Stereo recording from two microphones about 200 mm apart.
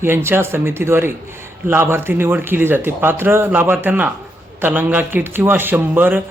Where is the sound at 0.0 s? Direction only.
10° right (ahead or behind).